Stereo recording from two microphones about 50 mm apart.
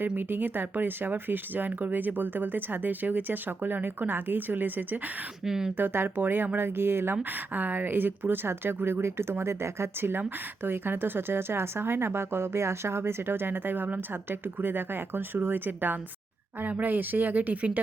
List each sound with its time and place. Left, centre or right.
0.2 s speech: right
5.5 s speech: centre
5.7 s speech: right
7.2 s speech: right